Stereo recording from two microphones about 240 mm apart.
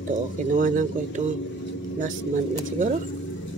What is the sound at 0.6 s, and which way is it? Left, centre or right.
Speech, right.